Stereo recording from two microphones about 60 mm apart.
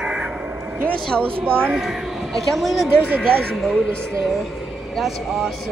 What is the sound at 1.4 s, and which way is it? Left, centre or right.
Speech, right.